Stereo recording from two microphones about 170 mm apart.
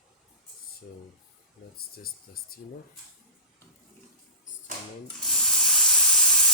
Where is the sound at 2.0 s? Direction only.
60° left (ahead or behind).